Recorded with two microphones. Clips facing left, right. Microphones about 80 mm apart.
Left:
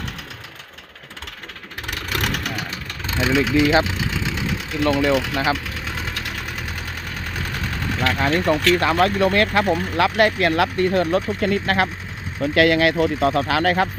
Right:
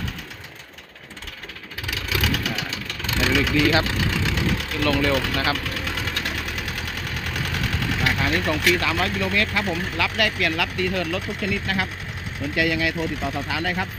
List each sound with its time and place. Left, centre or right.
2.0 s vehicle: left
3.1 s engine: left
6.4 s engine: left
8.7 s speech: left
12.5 s speech: left